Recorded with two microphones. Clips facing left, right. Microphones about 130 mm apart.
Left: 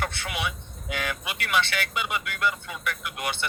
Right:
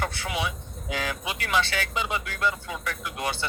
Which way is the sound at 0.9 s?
30° right (ahead or behind).